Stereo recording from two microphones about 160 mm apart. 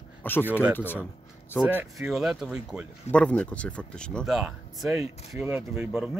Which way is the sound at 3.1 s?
5° left (ahead or behind).